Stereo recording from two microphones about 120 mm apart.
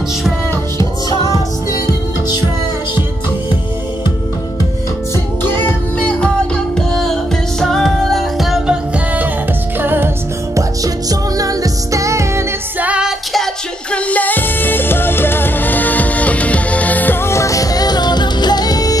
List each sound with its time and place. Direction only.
5.4 s music: 15° left (ahead or behind); by 10.6 s 20° right (ahead or behind)
10.8 s music: 30° right (ahead or behind)
12.8 s music: 10° right (ahead or behind)
13.9 s music: 10° left (ahead or behind); by 18.9 s 30° left (ahead or behind)